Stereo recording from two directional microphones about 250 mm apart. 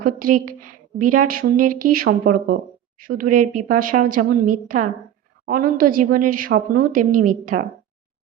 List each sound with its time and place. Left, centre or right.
0.0 s a woman's voice: right